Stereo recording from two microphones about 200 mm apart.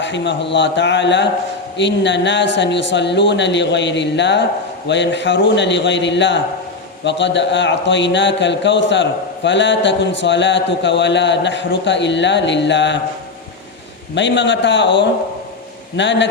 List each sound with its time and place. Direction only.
0.0 s a man's voice: 65° left (ahead or behind)
14.2 s a man's voice: 65° left (ahead or behind)